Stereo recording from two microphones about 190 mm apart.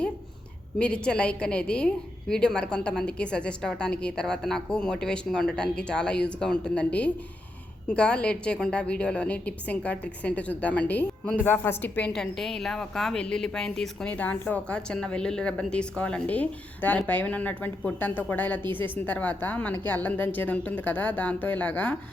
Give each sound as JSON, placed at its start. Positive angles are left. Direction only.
{"t": 0.8, "sound": "a woman's voice", "side_deg": 5}